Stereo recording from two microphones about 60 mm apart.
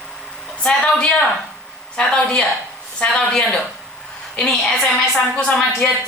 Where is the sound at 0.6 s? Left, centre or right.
Centre.